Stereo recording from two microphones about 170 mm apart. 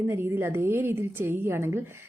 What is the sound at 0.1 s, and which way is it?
Speech, 15° right (ahead or behind).